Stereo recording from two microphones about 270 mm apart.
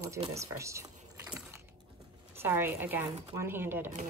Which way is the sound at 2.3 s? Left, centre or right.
Centre.